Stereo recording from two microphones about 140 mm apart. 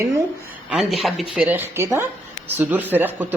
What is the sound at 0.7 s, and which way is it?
Speech, centre (ahead or behind).